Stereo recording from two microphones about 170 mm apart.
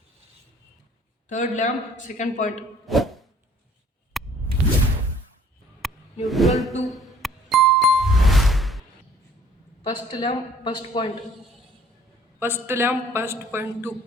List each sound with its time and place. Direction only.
1.3 s a man's voice: 45° left (ahead or behind)
2.8 s a sound: centre (ahead or behind)
5.8 s music: centre (ahead or behind)
6.2 s a sound: centre (ahead or behind)
7.2 s music: centre (ahead or behind)
9.8 s a woman's voice: 25° left (ahead or behind)
12.4 s a man's voice: 15° right (ahead or behind)